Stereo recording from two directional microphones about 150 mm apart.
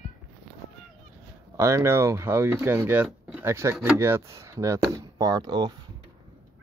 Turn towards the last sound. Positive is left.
turn(degrees=-30)  # may be behind; listen again after turning